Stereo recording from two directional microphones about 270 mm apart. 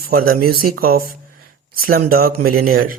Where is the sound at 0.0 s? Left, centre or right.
Right.